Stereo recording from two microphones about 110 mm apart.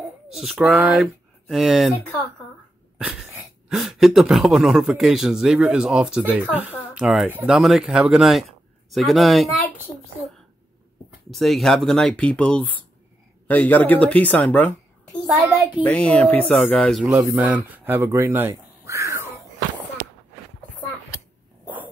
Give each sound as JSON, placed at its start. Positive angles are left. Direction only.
{"t": 0.3, "sound": "speech", "side_deg": -5}
{"t": 3.0, "sound": "dog", "side_deg": -5}
{"t": 3.6, "sound": "a man's voice", "side_deg": -5}
{"t": 11.2, "sound": "a man's voice", "side_deg": 0}
{"t": 15.2, "sound": "a man's voice", "side_deg": 0}
{"t": 17.1, "sound": "speech", "side_deg": -25}
{"t": 17.4, "sound": "speech", "side_deg": -15}